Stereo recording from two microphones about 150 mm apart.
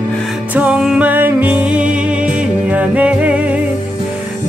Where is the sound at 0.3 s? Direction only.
10° right (ahead or behind).